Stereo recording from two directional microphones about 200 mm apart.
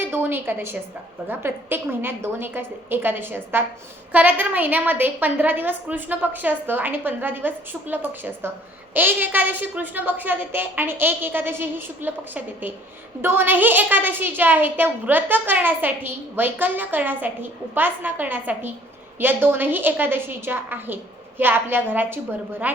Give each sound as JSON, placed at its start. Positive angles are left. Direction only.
{"t": 0.0, "sound": "a woman's voice", "side_deg": -10}